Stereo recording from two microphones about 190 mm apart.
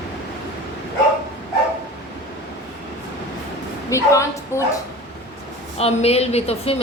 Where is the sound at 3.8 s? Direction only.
15° left (ahead or behind).